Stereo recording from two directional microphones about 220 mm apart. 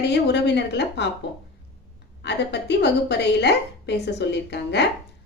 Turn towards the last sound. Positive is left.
turn(degrees=50)  # may be behind; listen again after turning